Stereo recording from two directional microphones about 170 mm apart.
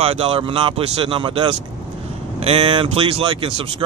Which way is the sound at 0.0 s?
35° right (ahead or behind).